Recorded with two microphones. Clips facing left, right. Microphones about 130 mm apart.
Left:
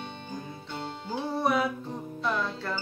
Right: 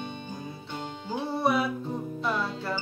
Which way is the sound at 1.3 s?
5° right (ahead or behind).